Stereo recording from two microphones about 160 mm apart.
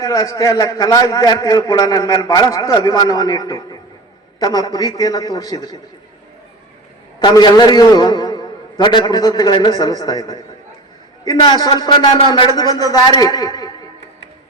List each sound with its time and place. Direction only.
0.0 s a man's voice: 20° left (ahead or behind)
7.2 s a man's voice: 30° left (ahead or behind)